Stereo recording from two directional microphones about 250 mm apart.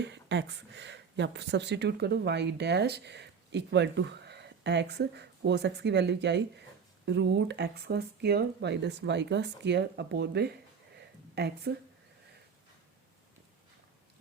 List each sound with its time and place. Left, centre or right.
0.0 s a woman's voice: right